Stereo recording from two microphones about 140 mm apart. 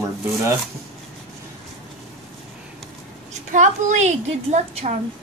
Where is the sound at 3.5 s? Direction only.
60° right (ahead or behind).